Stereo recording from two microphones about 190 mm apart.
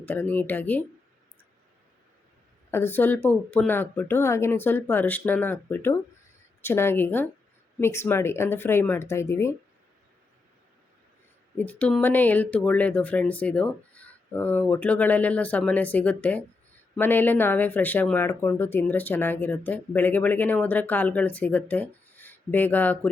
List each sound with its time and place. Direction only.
0.0 s speech: 10° left (ahead or behind)
2.6 s speech: 10° left (ahead or behind)
11.5 s speech: 10° left (ahead or behind)